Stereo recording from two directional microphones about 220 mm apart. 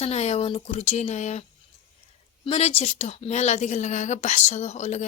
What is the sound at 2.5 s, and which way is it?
A woman's voice, 30° left (ahead or behind).